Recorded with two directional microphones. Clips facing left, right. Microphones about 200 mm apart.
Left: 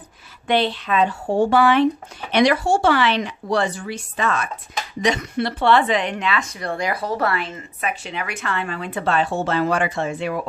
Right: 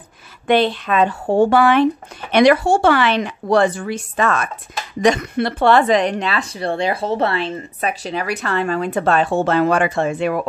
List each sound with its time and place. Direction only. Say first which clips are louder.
0.5 s speech: right 4 dB; 50° right (ahead or behind)